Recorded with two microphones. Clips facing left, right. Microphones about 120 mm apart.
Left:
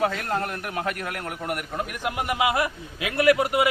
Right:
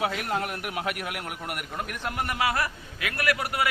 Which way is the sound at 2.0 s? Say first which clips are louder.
Left 3 dB; 15° left (ahead or behind).